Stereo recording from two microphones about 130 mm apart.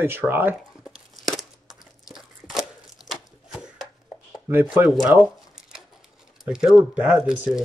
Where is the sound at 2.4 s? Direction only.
5° right (ahead or behind).